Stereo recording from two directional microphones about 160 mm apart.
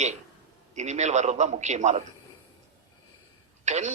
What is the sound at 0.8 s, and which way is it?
Speech, 45° right (ahead or behind).